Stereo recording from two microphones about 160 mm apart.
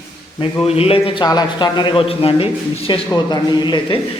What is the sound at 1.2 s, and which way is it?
A man's voice, 25° left (ahead or behind).